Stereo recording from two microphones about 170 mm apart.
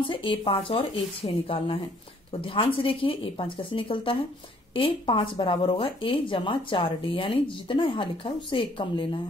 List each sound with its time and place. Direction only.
0.1 s a woman's voice: 30° left (ahead or behind)